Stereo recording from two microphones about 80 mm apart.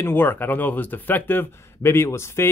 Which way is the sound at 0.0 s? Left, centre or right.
Left.